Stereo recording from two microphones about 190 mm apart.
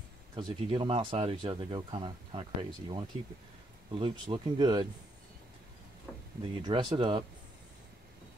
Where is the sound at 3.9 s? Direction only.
25° right (ahead or behind).